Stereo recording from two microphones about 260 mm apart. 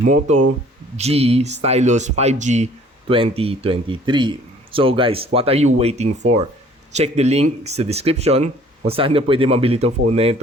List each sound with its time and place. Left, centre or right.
0.9 s a man's voice: right